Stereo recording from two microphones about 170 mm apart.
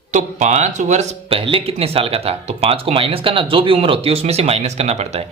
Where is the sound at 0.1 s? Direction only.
45° right (ahead or behind).